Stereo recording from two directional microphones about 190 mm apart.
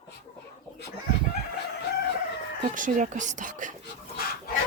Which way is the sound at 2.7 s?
45° right (ahead or behind).